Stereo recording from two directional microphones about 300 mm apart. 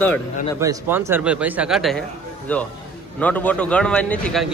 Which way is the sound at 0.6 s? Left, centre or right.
Centre.